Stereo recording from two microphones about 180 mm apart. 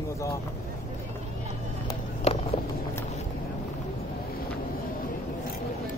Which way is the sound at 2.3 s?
35° left (ahead or behind).